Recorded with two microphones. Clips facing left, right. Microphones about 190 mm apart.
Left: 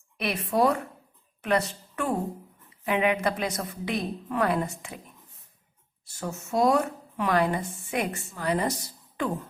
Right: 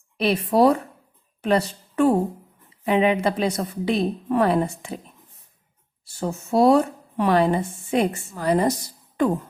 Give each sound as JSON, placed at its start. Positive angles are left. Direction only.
{"t": 0.2, "sound": "a woman's voice", "side_deg": -30}
{"t": 6.1, "sound": "a woman's voice", "side_deg": -30}